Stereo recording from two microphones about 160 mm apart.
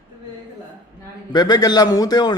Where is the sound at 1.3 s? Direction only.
25° left (ahead or behind).